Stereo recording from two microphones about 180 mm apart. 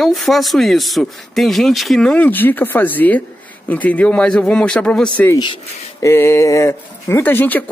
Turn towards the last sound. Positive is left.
turn(degrees=10)  # may be behind; listen again after turning